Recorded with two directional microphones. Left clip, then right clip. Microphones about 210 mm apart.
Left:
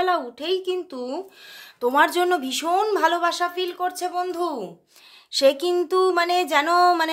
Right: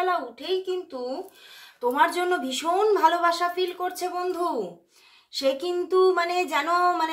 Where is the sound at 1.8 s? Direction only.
50° left (ahead or behind).